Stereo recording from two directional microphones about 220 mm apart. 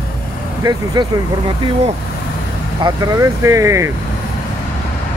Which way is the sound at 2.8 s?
15° right (ahead or behind).